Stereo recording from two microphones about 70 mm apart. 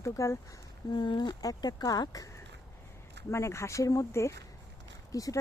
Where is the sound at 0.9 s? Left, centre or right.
Left.